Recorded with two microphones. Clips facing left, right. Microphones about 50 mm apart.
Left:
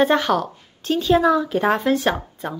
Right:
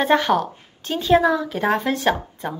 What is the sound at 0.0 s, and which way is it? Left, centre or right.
A woman's voice, centre.